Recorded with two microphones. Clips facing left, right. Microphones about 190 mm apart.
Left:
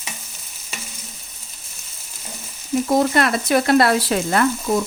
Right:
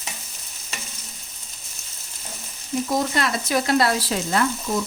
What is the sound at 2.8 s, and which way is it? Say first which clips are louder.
Speech: left 6 dB; 55° left (ahead or behind).